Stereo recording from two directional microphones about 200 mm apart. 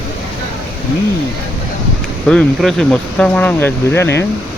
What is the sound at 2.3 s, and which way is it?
Speech, 5° left (ahead or behind).